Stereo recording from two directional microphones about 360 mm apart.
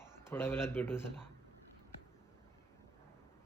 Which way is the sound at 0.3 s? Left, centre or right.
Centre.